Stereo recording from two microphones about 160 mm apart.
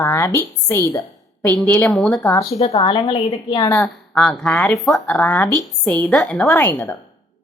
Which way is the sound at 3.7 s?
5° left (ahead or behind).